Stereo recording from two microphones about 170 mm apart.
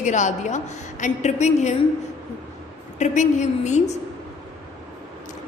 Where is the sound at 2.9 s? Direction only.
45° left (ahead or behind).